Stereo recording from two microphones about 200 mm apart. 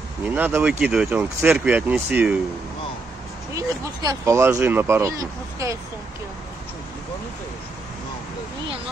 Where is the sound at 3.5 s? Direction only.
15° right (ahead or behind).